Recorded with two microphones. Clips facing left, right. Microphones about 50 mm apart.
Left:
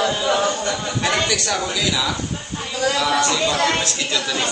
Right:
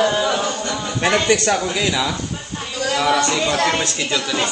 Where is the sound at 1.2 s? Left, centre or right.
Right.